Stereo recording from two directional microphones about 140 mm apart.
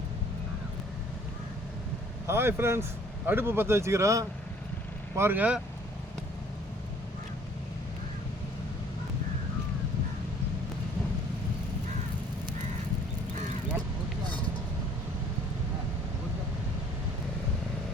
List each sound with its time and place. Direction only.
2.2 s a man's voice: 20° right (ahead or behind)